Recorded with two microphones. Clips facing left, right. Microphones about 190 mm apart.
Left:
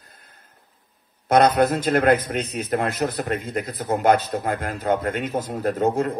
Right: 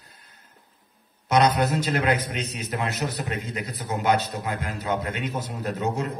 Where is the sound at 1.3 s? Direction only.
55° left (ahead or behind).